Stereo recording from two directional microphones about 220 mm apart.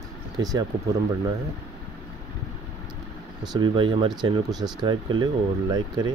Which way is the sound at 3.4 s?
20° right (ahead or behind).